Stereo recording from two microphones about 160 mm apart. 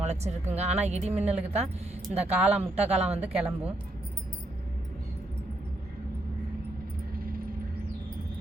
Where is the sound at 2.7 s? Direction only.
40° right (ahead or behind).